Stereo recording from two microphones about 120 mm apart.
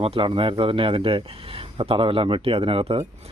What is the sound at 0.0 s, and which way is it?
Speech, 50° right (ahead or behind).